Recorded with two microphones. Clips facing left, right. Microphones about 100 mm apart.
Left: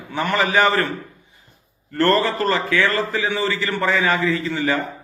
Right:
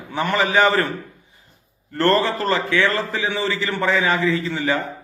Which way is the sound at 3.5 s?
Centre (ahead or behind).